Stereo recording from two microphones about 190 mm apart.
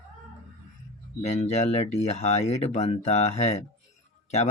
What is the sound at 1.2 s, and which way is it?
Speech, 35° left (ahead or behind).